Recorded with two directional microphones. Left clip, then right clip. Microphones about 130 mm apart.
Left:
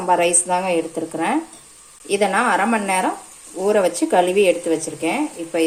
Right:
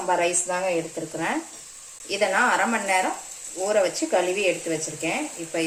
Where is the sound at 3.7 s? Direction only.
90° left.